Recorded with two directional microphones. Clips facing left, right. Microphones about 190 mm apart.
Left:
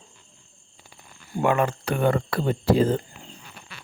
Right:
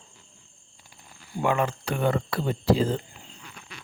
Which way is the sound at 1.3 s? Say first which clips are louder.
Left 3 dB; 55° left (ahead or behind).